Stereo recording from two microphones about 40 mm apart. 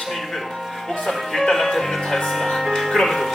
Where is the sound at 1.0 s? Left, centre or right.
Centre.